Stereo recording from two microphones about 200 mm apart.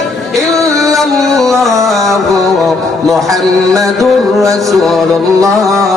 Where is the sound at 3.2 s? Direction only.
15° right (ahead or behind).